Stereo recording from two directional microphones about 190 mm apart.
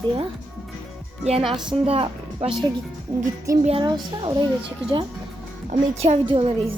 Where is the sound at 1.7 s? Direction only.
30° right (ahead or behind).